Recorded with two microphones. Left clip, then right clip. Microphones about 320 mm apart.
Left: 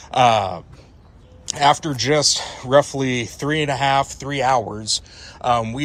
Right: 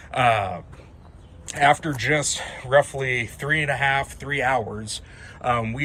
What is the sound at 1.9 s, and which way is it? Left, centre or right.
Speech, left.